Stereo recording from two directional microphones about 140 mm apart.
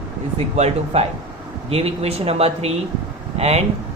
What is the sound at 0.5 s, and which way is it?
Speech, 50° right (ahead or behind).